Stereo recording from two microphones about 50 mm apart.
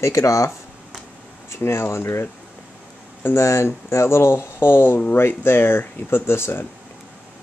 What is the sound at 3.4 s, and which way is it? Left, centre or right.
Speech, left.